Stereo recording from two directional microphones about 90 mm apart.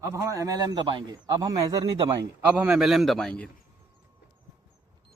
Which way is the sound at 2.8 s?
Centre (ahead or behind).